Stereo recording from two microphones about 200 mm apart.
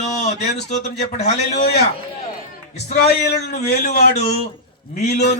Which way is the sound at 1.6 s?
55° left (ahead or behind).